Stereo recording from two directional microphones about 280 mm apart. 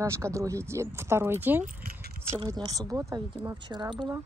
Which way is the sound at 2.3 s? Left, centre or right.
Centre.